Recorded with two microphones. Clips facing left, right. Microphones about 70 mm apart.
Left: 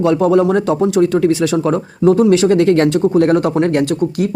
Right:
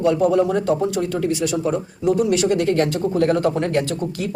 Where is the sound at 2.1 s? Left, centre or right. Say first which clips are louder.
Left 6 dB; left.